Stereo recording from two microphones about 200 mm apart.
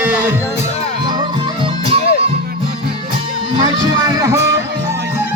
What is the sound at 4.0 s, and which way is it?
Music, 15° right (ahead or behind).